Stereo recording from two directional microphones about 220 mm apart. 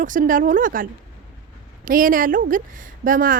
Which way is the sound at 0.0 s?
35° right (ahead or behind).